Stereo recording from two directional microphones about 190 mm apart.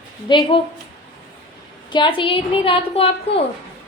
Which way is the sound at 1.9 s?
25° left (ahead or behind).